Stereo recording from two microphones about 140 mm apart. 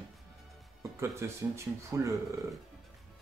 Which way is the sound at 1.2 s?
20° right (ahead or behind).